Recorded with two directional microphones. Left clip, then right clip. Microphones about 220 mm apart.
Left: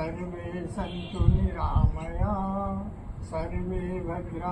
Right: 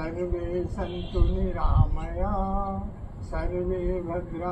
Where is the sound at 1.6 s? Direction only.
10° right (ahead or behind).